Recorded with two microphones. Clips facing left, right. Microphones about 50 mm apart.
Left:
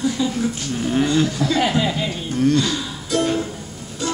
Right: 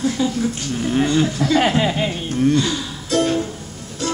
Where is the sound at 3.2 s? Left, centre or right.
Centre.